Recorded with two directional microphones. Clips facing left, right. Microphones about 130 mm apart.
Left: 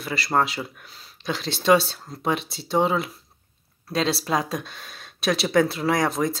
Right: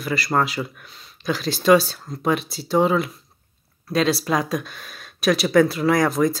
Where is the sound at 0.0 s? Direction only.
25° left (ahead or behind).